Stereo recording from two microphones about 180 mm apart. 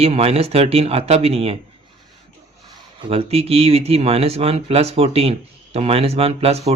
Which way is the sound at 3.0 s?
30° right (ahead or behind).